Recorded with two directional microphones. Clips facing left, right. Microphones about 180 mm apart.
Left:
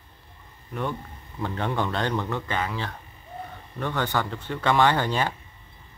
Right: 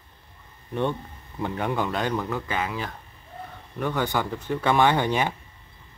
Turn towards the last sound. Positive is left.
turn(degrees=-15)  # may be behind; listen again after turning